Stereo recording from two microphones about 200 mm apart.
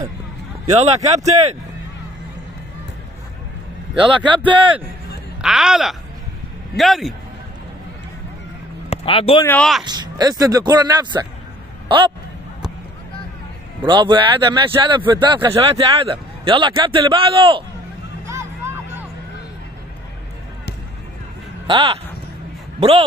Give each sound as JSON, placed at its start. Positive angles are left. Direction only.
{"t": 0.7, "sound": "speech", "side_deg": -35}
{"t": 4.0, "sound": "speech", "side_deg": -25}
{"t": 5.4, "sound": "speech", "side_deg": -5}
{"t": 8.9, "sound": "speech", "side_deg": 30}
{"t": 9.4, "sound": "speech", "side_deg": 10}
{"t": 9.8, "sound": "speech", "side_deg": -20}
{"t": 13.8, "sound": "speech", "side_deg": -25}
{"t": 18.2, "sound": "music", "side_deg": -15}
{"t": 21.6, "sound": "speech", "side_deg": -30}